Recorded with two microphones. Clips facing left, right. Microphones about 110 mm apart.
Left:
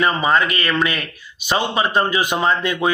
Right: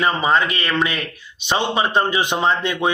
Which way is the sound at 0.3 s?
25° right (ahead or behind).